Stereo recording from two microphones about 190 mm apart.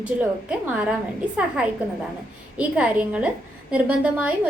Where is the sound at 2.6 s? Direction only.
5° right (ahead or behind).